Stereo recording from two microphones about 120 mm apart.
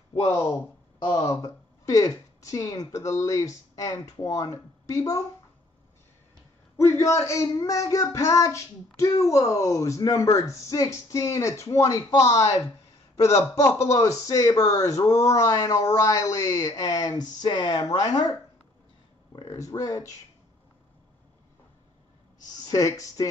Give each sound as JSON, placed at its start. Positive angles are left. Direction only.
{"t": 0.2, "sound": "speech", "side_deg": 30}
{"t": 6.8, "sound": "speech", "side_deg": 25}
{"t": 19.4, "sound": "speech", "side_deg": 25}
{"t": 22.6, "sound": "speech", "side_deg": 30}